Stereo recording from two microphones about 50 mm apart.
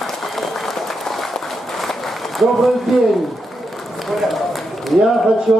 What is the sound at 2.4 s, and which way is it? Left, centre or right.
A man's voice, centre.